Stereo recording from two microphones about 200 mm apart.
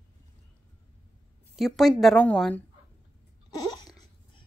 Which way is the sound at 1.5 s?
Centre (ahead or behind).